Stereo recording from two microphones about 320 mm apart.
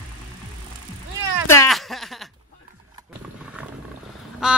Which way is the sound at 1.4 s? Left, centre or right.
Centre.